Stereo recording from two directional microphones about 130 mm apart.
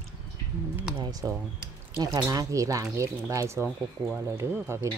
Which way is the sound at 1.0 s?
30° right (ahead or behind).